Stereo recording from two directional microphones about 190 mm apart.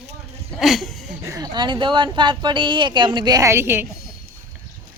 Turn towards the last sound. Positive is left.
turn(degrees=-10)  # may be behind; listen again after turning